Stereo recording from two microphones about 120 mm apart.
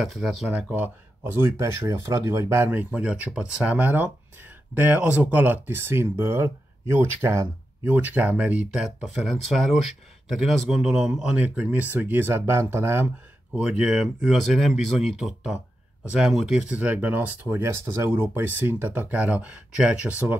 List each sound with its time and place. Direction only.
0.1 s speech: centre (ahead or behind)
0.5 s speech: 15° right (ahead or behind)